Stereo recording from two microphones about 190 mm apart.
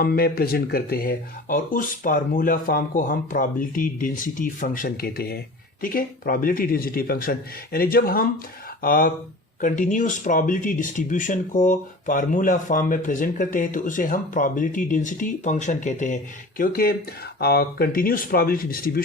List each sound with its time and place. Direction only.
0.0 s speech: 55° left (ahead or behind)